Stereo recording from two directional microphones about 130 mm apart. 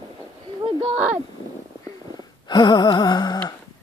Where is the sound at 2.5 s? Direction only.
35° left (ahead or behind).